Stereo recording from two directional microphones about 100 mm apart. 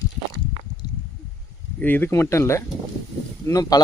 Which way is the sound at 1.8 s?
20° left (ahead or behind).